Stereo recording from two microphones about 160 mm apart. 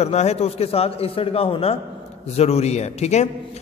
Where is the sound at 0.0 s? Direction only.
45° left (ahead or behind).